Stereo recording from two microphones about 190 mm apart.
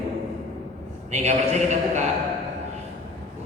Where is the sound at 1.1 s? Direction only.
35° right (ahead or behind).